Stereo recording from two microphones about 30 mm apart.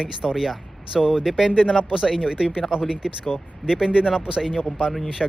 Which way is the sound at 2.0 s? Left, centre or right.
Centre.